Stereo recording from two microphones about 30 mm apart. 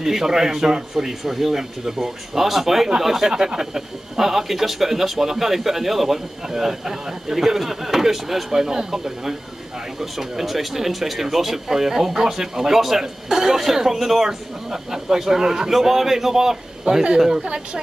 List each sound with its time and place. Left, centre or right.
0.0 s speech: centre